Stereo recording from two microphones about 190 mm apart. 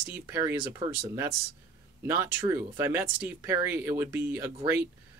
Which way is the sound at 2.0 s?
10° right (ahead or behind).